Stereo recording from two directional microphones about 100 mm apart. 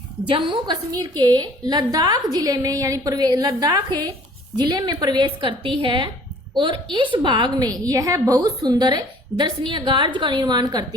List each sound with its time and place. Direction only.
0.3 s a woman's voice: 55° right (ahead or behind)